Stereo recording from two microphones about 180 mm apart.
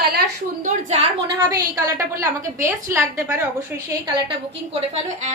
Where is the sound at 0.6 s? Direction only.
40° right (ahead or behind).